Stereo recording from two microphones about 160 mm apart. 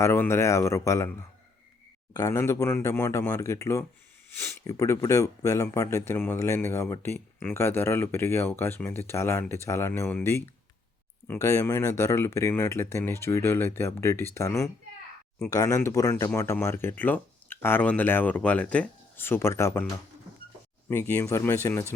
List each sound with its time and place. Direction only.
0.0 s speech: 15° left (ahead or behind)
20.9 s speech: 15° left (ahead or behind)